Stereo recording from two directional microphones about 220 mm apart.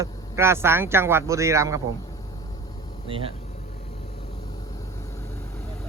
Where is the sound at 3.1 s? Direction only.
25° right (ahead or behind).